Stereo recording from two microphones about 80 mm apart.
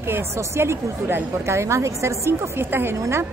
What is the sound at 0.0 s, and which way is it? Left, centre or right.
A woman's voice, right.